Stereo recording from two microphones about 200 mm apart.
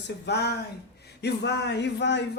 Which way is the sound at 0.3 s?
55° left (ahead or behind).